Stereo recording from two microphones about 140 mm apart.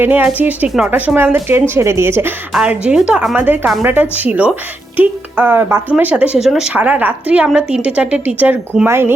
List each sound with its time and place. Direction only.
0.0 s a woman's voice: 10° right (ahead or behind)
2.5 s a woman's voice: 5° right (ahead or behind)